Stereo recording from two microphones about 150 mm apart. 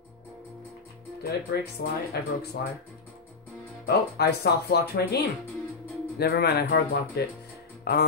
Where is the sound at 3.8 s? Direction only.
90° left.